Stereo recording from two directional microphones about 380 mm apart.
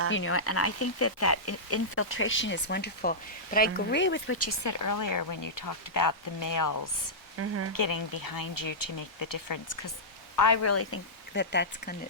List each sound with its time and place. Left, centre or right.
0.1 s speech: left
7.3 s speech: right
7.7 s speech: left